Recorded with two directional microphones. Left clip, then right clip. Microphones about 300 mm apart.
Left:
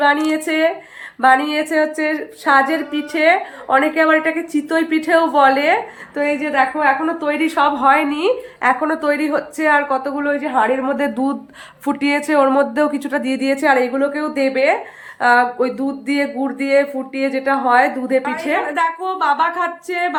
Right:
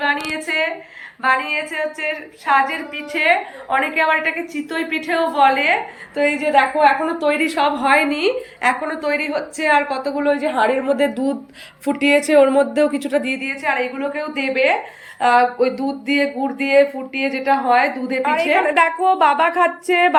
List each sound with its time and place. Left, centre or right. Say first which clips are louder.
0.0 s a woman's voice: left 5 dB; centre
18.8 s speech: right 4 dB; centre